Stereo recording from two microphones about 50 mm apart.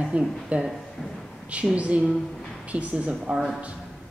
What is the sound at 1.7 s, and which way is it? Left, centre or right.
A woman's voice, right.